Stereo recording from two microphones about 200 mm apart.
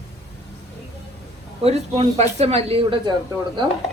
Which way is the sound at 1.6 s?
30° right (ahead or behind).